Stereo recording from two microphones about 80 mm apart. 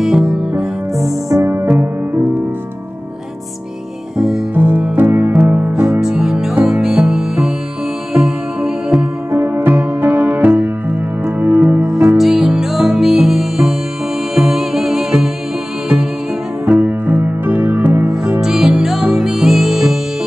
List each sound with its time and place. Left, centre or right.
0.0 s music: centre
1.4 s music: right
4.6 s music: right
5.7 s music: centre
9.3 s music: right
12.1 s music: centre
16.6 s music: right
18.4 s music: centre